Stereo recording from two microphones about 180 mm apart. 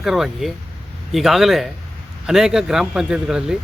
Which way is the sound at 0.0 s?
Centre (ahead or behind).